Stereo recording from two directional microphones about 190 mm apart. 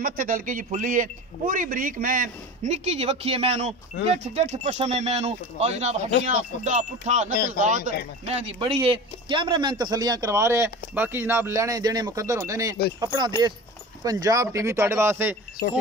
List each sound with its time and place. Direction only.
0.0 s speech: 45° right (ahead or behind)
8.8 s speech: 25° right (ahead or behind)